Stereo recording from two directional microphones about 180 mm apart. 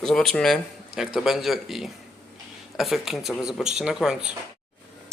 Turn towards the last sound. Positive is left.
turn(degrees=-5)  # may be behind; listen again after turning